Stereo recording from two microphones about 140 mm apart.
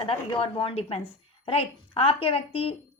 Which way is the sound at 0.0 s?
40° left (ahead or behind).